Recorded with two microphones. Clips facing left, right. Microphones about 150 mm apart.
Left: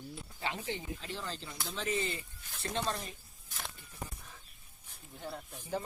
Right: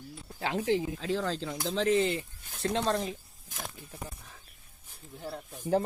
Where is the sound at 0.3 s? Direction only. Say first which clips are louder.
Right 10 dB; 90° right.